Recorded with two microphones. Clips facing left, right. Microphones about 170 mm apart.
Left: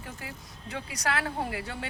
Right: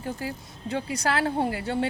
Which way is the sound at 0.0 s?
30° right (ahead or behind).